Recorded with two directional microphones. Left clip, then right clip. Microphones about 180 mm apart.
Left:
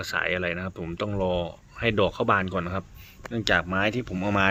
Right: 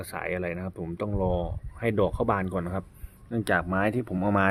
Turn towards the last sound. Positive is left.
turn(degrees=-20)  # may be behind; listen again after turning